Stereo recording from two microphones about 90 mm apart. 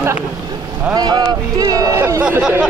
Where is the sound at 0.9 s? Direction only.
50° right (ahead or behind).